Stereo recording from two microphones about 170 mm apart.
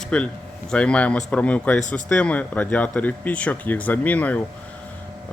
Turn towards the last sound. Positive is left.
turn(degrees=10)  # may be behind; listen again after turning